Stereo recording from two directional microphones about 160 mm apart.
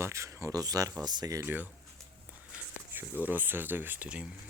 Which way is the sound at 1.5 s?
10° right (ahead or behind).